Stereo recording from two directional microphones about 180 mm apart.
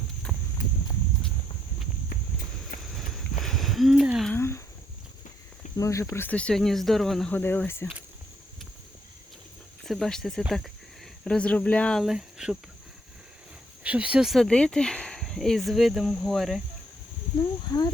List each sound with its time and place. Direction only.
3.4 s a sound: centre (ahead or behind)
4.3 s a sound: 15° left (ahead or behind)
5.7 s speech: 15° left (ahead or behind)
9.8 s speech: centre (ahead or behind)
13.8 s speech: 5° right (ahead or behind)
17.7 s speech: 25° left (ahead or behind)